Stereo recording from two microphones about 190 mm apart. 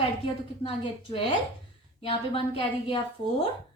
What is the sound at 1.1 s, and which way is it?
A woman's voice, 25° left (ahead or behind).